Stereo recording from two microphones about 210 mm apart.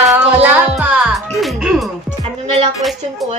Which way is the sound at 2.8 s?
Centre (ahead or behind).